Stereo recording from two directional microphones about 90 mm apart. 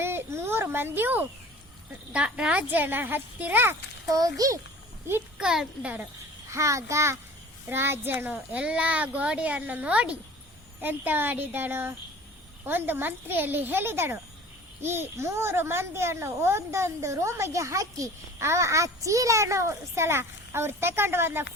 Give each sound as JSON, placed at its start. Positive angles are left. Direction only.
{"t": 0.0, "sound": "a child's voice", "side_deg": -25}
{"t": 2.1, "sound": "speech", "side_deg": -10}
{"t": 4.1, "sound": "speech", "side_deg": -40}
{"t": 5.4, "sound": "a child's voice", "side_deg": -5}
{"t": 6.5, "sound": "a child's voice", "side_deg": -35}